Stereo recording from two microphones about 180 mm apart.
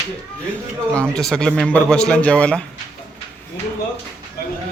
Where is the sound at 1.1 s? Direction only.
5° left (ahead or behind).